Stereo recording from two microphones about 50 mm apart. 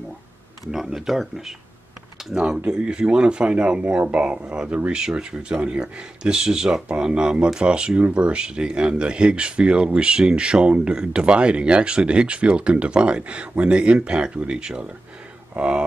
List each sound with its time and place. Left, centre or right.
0.7 s speech: centre
2.3 s speech: centre